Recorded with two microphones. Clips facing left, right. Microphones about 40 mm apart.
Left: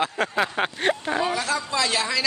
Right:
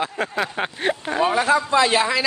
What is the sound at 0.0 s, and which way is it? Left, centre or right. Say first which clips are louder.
Speech: even; centre.